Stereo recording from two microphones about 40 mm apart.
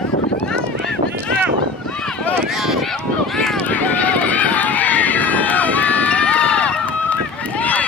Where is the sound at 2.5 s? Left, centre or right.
Centre.